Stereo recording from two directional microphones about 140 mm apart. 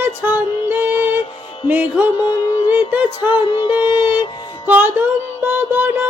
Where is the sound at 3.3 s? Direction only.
35° left (ahead or behind).